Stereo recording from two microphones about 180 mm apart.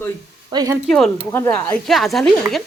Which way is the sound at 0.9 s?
5° left (ahead or behind).